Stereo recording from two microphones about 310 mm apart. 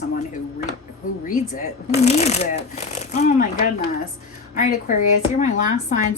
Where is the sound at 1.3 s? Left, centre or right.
Left.